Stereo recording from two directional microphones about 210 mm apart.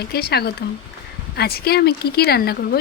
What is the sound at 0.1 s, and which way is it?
Speech, 50° left (ahead or behind).